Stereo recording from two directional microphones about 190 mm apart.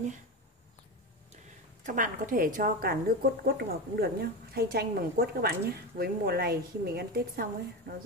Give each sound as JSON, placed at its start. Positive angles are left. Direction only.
{"t": 1.9, "sound": "a woman's voice", "side_deg": -45}